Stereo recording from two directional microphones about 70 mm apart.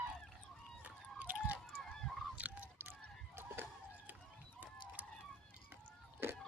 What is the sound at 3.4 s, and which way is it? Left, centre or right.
Fowl, right.